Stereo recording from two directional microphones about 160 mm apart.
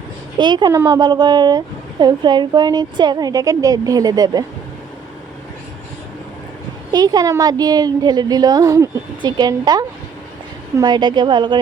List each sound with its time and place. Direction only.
0.3 s speech: 30° right (ahead or behind)
6.9 s speech: 25° right (ahead or behind)